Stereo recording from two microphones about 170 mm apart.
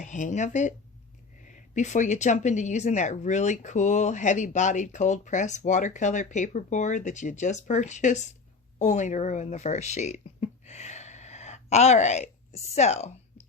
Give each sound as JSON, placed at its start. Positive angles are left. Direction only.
{"t": 0.0, "sound": "speech", "side_deg": 45}